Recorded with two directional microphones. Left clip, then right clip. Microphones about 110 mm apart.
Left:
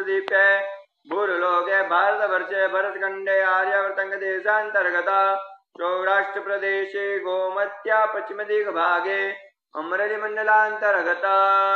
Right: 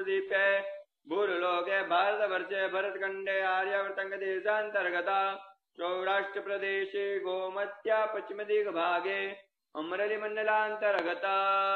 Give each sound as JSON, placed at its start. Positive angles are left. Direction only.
{"t": 0.0, "sound": "a sound", "side_deg": -30}
{"t": 1.1, "sound": "a man's voice", "side_deg": -30}
{"t": 3.7, "sound": "mantra", "side_deg": -35}